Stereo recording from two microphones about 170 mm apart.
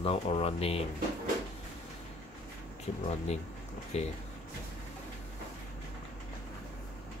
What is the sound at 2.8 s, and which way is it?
Speech, 40° left (ahead or behind).